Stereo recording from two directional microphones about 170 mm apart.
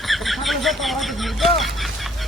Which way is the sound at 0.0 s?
Centre (ahead or behind).